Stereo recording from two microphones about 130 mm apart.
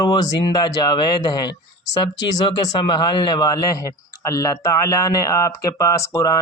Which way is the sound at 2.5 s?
35° left (ahead or behind).